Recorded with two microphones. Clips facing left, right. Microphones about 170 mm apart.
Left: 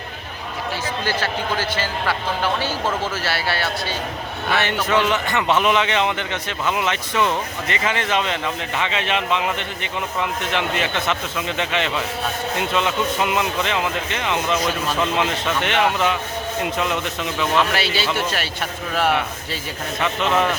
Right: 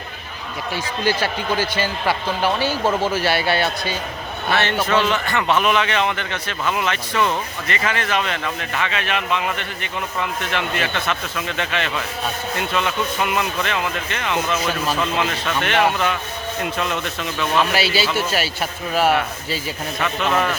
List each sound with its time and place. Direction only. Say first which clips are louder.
1.0 s speech: right 4 dB; 10° right (ahead or behind)
4.5 s a man's voice: right 1 dB; 15° left (ahead or behind)
17.6 s a man's voice: right 1 dB; 5° right (ahead or behind)